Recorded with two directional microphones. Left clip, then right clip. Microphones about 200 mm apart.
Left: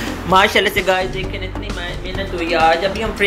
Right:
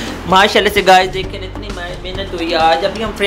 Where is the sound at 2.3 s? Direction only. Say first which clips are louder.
Right 2 dB; 20° right (ahead or behind).